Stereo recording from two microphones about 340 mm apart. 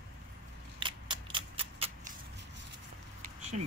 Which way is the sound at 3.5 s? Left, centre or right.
Right.